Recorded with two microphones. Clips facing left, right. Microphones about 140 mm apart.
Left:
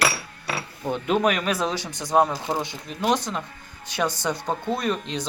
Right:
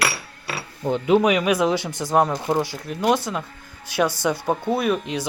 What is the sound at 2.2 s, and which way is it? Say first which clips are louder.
Speech: right 3 dB; centre (ahead or behind).